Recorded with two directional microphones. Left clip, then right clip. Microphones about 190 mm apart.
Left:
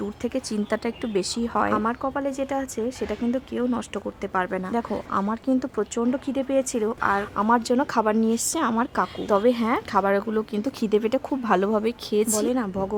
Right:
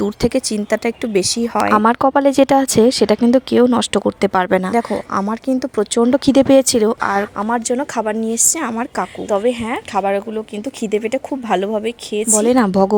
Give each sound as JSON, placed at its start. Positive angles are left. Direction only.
{"t": 0.0, "sound": "speech", "side_deg": -25}
{"t": 1.7, "sound": "speech", "side_deg": -50}
{"t": 4.7, "sound": "speech", "side_deg": -25}
{"t": 6.1, "sound": "speech", "side_deg": -45}
{"t": 6.7, "sound": "speech", "side_deg": -30}
{"t": 7.4, "sound": "a woman's voice", "side_deg": -10}
{"t": 12.5, "sound": "speech", "side_deg": -35}